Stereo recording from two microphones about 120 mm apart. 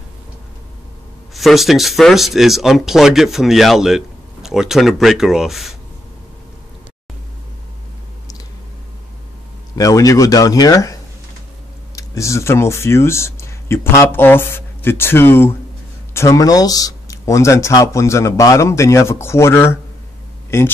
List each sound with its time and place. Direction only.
1.3 s speech: centre (ahead or behind)
9.8 s speech: 30° left (ahead or behind)